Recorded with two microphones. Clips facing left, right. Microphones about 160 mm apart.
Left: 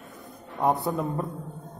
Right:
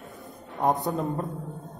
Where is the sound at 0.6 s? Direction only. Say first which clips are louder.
Even; centre (ahead or behind).